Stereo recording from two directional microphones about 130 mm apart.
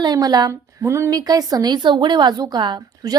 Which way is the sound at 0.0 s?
30° right (ahead or behind).